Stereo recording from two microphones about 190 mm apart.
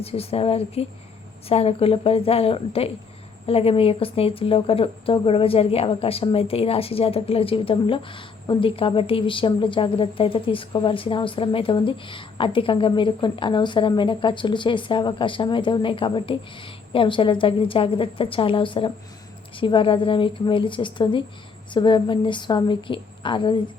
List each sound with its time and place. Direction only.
0.0 s a woman's voice: 30° left (ahead or behind)